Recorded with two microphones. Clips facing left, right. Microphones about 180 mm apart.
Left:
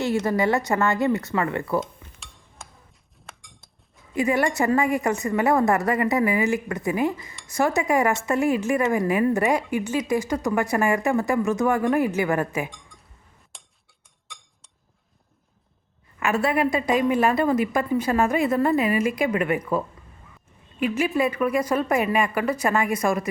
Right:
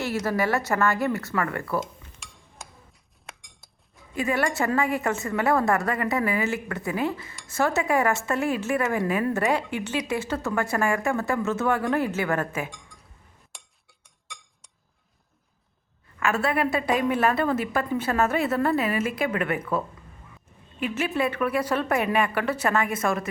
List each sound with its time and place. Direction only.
0.0 s speech: 15° left (ahead or behind)
1.8 s dishes: centre (ahead or behind)
4.2 s speech: 15° left (ahead or behind)
13.5 s a sound: centre (ahead or behind)
16.2 s speech: 15° left (ahead or behind)
20.9 s speech: 10° left (ahead or behind)